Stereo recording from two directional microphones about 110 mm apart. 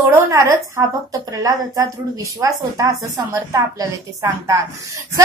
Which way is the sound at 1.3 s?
30° right (ahead or behind).